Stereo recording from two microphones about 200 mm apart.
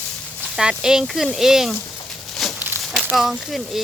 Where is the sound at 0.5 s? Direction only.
5° right (ahead or behind).